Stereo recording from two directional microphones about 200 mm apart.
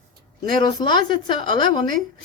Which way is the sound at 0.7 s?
20° left (ahead or behind).